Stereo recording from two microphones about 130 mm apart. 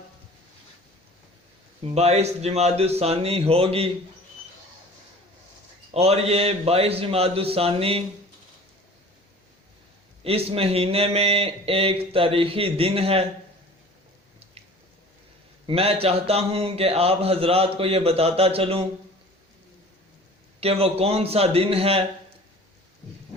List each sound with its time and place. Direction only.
1.8 s a man's voice: 55° right (ahead or behind)
5.9 s a man's voice: 50° right (ahead or behind)
10.2 s a man's voice: 50° right (ahead or behind)
15.6 s a man's voice: 50° right (ahead or behind)
20.6 s a man's voice: 50° right (ahead or behind)